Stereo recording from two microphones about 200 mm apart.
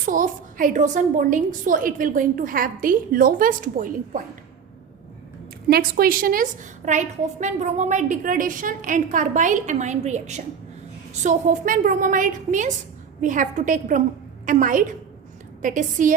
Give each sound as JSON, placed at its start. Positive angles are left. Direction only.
{"t": 0.0, "sound": "a woman's voice", "side_deg": -45}
{"t": 5.6, "sound": "a woman's voice", "side_deg": -50}